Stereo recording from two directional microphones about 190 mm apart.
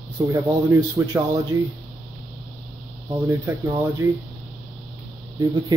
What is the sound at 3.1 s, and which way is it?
Speech, 15° right (ahead or behind).